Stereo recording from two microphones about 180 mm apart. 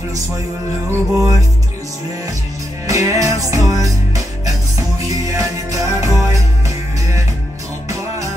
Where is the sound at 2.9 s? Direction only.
20° right (ahead or behind).